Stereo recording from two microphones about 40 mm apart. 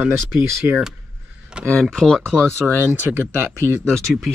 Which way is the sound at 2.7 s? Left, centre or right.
Right.